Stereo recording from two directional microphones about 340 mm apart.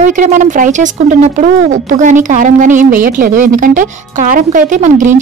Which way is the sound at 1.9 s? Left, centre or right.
Right.